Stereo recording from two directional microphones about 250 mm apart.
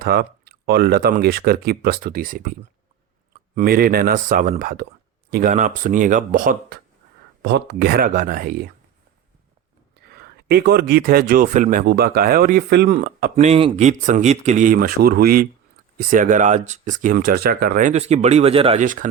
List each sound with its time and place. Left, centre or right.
0.0 s speech: right
10.1 s speech: right